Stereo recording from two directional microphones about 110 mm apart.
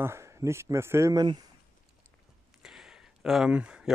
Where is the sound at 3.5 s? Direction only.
10° right (ahead or behind).